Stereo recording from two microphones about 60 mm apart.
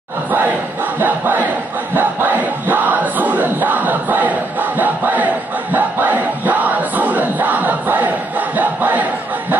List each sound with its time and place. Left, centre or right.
0.9 s battle cry: right
2.0 s crowd: right